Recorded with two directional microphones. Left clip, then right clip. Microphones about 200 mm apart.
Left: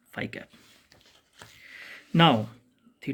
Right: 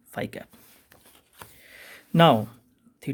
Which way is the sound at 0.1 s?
45° right (ahead or behind).